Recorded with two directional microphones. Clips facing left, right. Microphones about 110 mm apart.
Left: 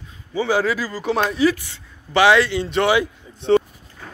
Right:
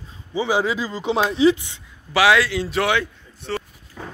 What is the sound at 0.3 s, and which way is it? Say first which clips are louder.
Speech: left 1 dB; 15° right (ahead or behind).